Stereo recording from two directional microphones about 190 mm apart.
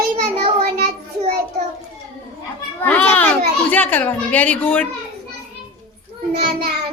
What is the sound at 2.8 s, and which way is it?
A child's voice, 10° left (ahead or behind).